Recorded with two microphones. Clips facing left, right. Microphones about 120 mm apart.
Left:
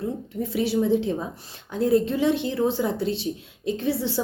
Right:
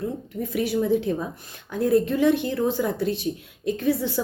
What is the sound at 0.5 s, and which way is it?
A woman's voice, 30° left (ahead or behind).